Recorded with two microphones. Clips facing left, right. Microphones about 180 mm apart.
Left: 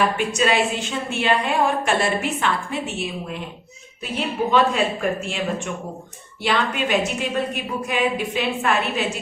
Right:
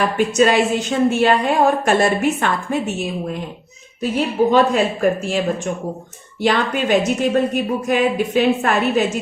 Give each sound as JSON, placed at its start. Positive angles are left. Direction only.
{"t": 0.2, "sound": "a woman's voice", "side_deg": -40}
{"t": 4.5, "sound": "a woman's voice", "side_deg": -40}